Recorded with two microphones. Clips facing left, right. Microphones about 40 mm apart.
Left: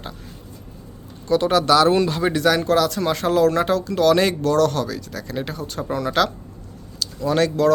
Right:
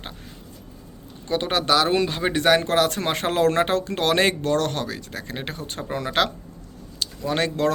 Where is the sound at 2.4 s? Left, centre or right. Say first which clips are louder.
Even; right.